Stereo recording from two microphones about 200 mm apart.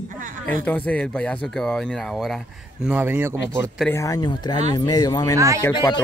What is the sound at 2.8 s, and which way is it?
Speech, 10° right (ahead or behind).